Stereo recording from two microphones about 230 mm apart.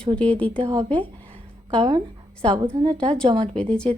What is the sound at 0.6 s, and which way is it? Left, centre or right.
A woman's voice, centre.